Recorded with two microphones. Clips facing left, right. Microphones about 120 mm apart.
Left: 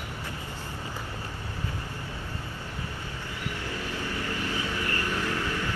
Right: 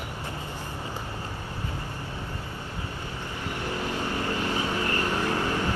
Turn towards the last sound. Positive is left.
turn(degrees=-20)  # may be behind; listen again after turning